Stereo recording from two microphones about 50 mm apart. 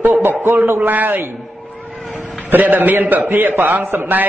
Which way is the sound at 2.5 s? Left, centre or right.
Right.